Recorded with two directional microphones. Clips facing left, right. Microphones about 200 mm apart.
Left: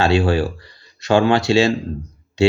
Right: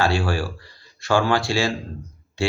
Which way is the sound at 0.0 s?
20° left (ahead or behind).